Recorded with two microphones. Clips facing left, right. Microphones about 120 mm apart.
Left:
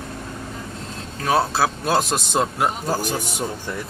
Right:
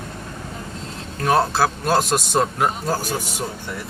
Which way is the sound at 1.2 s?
5° left (ahead or behind).